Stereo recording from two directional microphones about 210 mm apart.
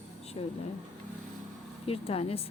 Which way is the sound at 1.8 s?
30° left (ahead or behind).